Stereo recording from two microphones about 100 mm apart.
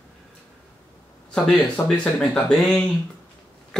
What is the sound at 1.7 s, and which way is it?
Speech, 10° left (ahead or behind).